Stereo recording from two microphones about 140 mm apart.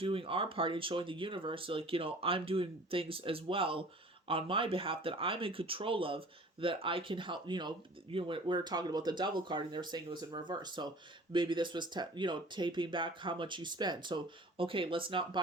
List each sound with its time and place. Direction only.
0.0 s speech: 40° right (ahead or behind)